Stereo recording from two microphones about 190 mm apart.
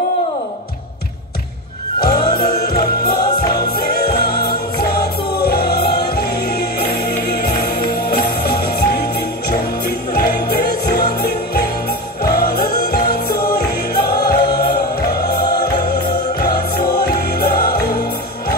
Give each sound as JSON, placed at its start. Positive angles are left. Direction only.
{"t": 2.1, "sound": "music", "side_deg": 55}